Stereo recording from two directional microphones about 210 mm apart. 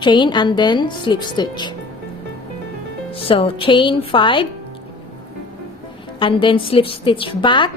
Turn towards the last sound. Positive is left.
turn(degrees=20)  # may be behind; listen again after turning